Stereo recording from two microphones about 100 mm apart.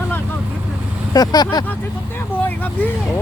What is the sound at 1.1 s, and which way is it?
Speech, 40° left (ahead or behind).